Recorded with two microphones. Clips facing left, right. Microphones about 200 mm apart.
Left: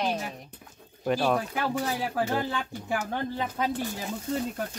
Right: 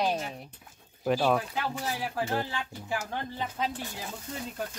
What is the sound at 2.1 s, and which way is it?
Speech, 60° left (ahead or behind).